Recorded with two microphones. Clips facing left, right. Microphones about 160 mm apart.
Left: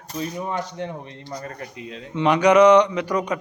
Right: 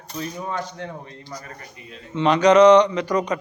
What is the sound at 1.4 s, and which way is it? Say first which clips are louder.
Speech: left 6 dB; 90° left.